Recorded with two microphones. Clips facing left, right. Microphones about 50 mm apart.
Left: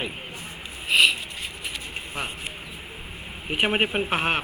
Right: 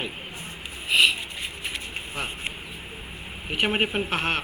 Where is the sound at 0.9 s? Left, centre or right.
Centre.